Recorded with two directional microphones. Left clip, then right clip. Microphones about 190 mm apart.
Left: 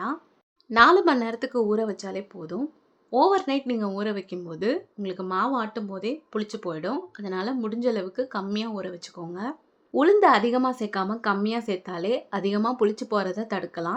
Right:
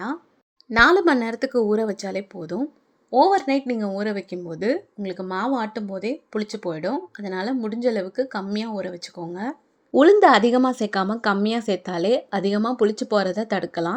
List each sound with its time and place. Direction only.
0.7 s speech: 15° right (ahead or behind)
3.1 s speech: 10° right (ahead or behind)
9.9 s a woman's voice: 30° right (ahead or behind)